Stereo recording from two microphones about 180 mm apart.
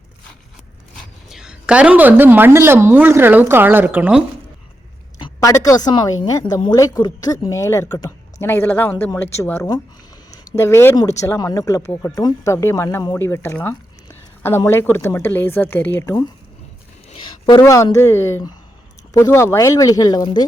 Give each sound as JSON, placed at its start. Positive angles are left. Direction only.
{"t": 1.3, "sound": "a woman's voice", "side_deg": -5}
{"t": 5.2, "sound": "a woman's voice", "side_deg": 15}
{"t": 17.1, "sound": "a sound", "side_deg": 25}
{"t": 17.6, "sound": "speech", "side_deg": 15}